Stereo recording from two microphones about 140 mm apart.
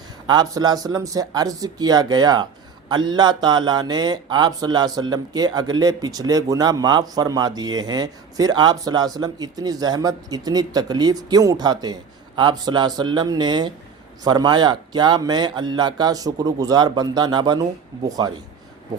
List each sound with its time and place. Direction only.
0.3 s a man's voice: 30° right (ahead or behind)